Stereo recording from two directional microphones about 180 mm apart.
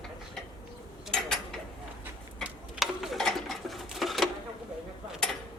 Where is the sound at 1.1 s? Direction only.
Centre (ahead or behind).